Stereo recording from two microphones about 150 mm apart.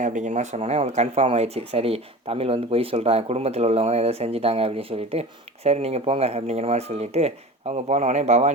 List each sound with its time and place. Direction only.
0.0 s speech: 55° right (ahead or behind)